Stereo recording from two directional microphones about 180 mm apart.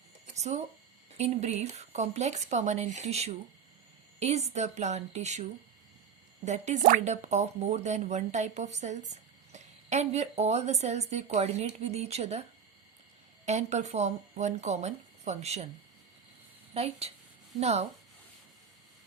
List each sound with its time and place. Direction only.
0.3 s a sound: 40° right (ahead or behind)
1.1 s speech: 35° right (ahead or behind)
16.7 s speech: 35° right (ahead or behind)